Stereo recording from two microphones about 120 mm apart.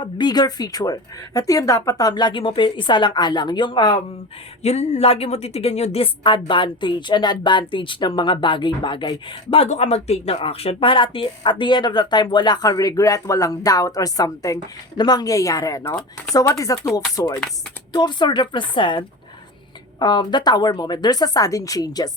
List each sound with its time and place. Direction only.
0.0 s speech: 35° left (ahead or behind)
4.6 s a woman's voice: 65° left (ahead or behind); by 9.6 s 45° left (ahead or behind)
9.6 s speech: 65° left (ahead or behind); by 22.1 s 30° left (ahead or behind)